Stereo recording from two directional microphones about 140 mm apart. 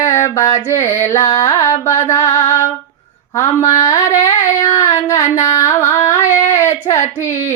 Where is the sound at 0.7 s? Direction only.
20° left (ahead or behind).